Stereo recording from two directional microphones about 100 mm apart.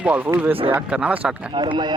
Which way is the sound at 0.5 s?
65° right (ahead or behind).